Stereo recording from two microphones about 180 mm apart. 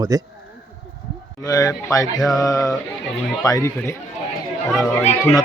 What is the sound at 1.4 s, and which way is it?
Speech, 20° left (ahead or behind).